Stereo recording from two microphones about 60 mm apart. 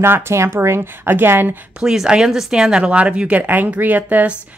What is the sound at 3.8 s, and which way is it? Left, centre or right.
Speech, right.